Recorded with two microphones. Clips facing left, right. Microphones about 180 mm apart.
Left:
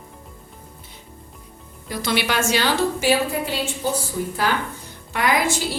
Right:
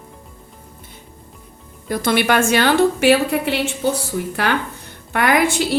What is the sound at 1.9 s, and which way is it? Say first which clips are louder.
A woman's voice: right 6 dB; 50° right (ahead or behind).